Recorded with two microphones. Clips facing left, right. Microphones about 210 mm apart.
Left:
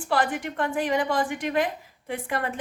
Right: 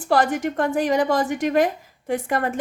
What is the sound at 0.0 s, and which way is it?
A woman's voice, 40° right (ahead or behind).